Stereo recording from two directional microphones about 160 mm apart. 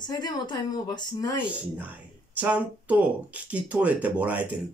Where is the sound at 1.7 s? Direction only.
10° right (ahead or behind).